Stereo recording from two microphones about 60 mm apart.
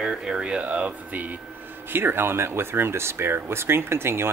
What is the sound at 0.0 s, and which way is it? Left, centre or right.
Speech, centre.